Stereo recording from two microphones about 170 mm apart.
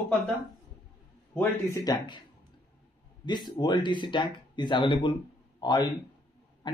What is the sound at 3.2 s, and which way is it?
Speech, 25° left (ahead or behind).